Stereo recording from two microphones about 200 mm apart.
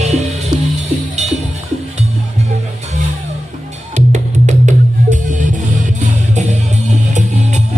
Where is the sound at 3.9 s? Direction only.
35° right (ahead or behind).